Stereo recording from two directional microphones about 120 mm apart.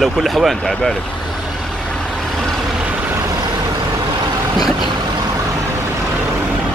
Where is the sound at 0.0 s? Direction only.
Centre (ahead or behind).